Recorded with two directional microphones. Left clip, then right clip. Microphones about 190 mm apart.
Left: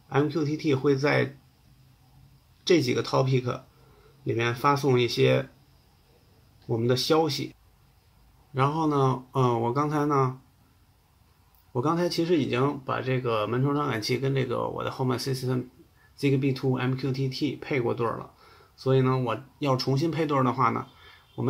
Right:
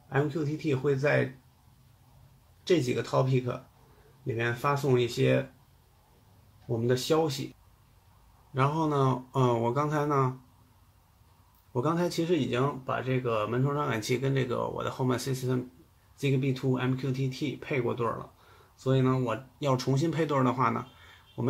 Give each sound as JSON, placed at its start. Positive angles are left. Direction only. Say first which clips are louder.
{"t": 0.1, "sound": "speech", "louder": "left 4 dB", "side_deg": 20}
{"t": 2.6, "sound": "speech", "louder": "left 4 dB", "side_deg": 20}
{"t": 6.9, "sound": "speech", "louder": "left 3 dB", "side_deg": 20}
{"t": 8.5, "sound": "speech", "louder": "left 3 dB", "side_deg": 10}
{"t": 11.7, "sound": "speech", "louder": "left 3 dB", "side_deg": 10}